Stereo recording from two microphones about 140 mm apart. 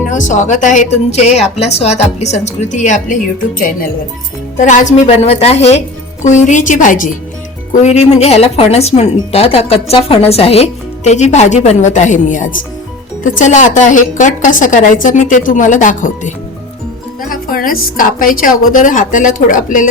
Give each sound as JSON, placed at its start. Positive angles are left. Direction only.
{"t": 0.1, "sound": "a woman's voice", "side_deg": 60}
{"t": 4.6, "sound": "speech", "side_deg": 60}
{"t": 6.2, "sound": "a woman's voice", "side_deg": 60}
{"t": 7.7, "sound": "a woman's voice", "side_deg": 55}
{"t": 17.2, "sound": "a woman's voice", "side_deg": 85}